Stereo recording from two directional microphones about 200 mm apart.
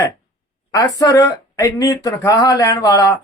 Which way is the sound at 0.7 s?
15° left (ahead or behind).